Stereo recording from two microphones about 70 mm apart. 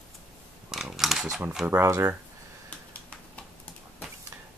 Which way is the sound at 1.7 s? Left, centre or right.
Right.